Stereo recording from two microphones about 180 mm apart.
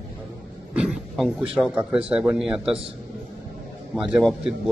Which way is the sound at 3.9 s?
5° right (ahead or behind).